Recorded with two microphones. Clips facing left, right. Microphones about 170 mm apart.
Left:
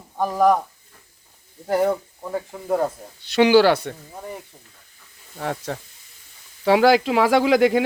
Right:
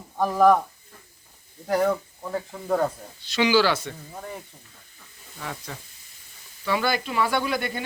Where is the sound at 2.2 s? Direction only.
10° left (ahead or behind).